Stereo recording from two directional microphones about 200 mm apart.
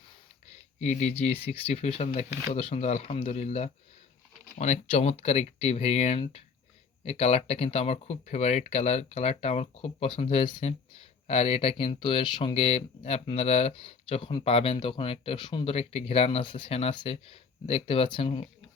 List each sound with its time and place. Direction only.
0.8 s speech: 35° left (ahead or behind)